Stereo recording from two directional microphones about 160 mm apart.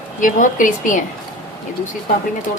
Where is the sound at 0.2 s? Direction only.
55° left (ahead or behind).